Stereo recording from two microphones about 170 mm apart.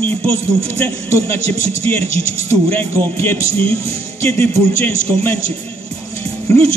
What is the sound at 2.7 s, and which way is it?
Speech, 10° left (ahead or behind).